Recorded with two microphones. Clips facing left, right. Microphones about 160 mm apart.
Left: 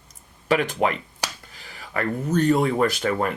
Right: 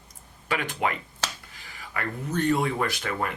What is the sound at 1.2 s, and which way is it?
Finger snapping, 15° left (ahead or behind).